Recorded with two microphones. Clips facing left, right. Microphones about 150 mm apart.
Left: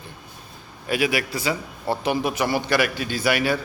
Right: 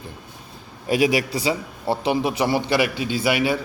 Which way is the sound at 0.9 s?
35° right (ahead or behind).